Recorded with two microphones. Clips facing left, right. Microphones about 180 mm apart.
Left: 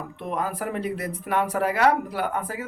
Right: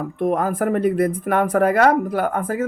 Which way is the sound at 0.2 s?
50° right (ahead or behind).